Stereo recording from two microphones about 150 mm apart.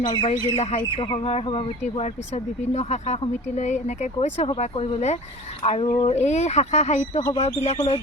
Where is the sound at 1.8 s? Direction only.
50° left (ahead or behind).